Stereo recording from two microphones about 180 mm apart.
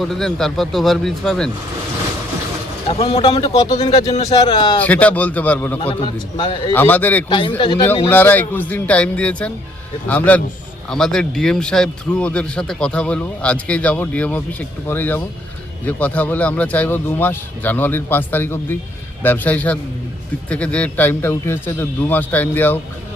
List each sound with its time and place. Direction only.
0.0 s speech: centre (ahead or behind)
2.9 s a man's voice: 35° left (ahead or behind)
3.9 s speech: 35° left (ahead or behind)
4.3 s a man's voice: 25° left (ahead or behind)
4.8 s a man's voice: 10° left (ahead or behind)
5.8 s a man's voice: 30° left (ahead or behind)
6.7 s a man's voice: 10° left (ahead or behind)
7.3 s a man's voice: 25° left (ahead or behind)
8.0 s a man's voice: 10° left (ahead or behind)